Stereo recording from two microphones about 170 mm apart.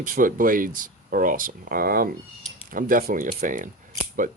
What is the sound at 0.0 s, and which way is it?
Speech, 50° right (ahead or behind).